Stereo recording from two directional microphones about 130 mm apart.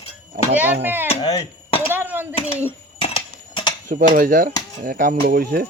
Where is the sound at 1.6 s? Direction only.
45° left (ahead or behind).